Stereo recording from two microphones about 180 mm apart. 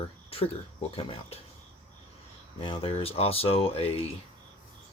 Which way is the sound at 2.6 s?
30° left (ahead or behind).